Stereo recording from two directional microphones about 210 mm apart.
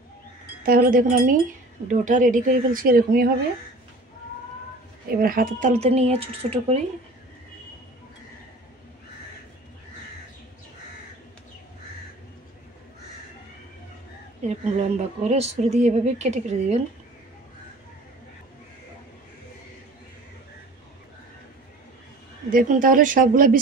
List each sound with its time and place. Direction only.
0.7 s speech: 40° right (ahead or behind)
5.1 s speech: 45° right (ahead or behind)
14.4 s speech: 30° right (ahead or behind)
22.5 s speech: 40° right (ahead or behind)